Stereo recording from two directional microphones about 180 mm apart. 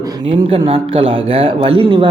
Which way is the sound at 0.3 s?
30° right (ahead or behind).